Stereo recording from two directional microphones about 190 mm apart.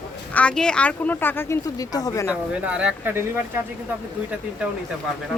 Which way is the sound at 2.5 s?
5° right (ahead or behind).